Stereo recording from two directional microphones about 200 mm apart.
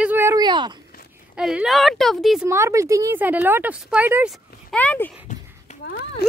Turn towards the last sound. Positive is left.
turn(degrees=50)  # may be behind; listen again after turning